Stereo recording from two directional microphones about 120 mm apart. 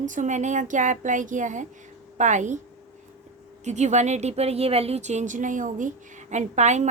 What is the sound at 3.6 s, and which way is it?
A woman's voice, 75° right (ahead or behind).